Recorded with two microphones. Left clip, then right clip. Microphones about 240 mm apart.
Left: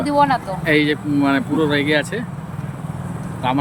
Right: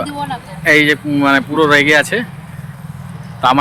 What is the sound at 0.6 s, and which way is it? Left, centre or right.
Speech, centre.